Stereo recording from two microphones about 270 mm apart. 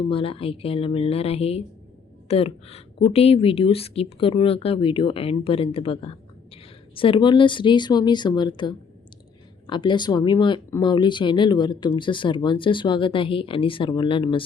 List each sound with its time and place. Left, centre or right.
0.1 s a woman's voice: centre